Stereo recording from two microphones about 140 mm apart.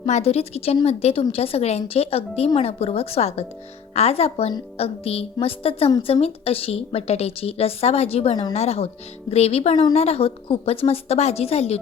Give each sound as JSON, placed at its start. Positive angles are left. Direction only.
{"t": 0.0, "sound": "a woman's voice", "side_deg": 45}